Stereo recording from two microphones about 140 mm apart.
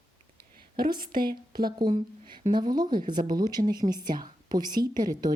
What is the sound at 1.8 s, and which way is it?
Speech, 30° right (ahead or behind).